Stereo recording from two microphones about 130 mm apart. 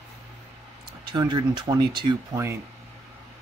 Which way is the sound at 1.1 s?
35° right (ahead or behind).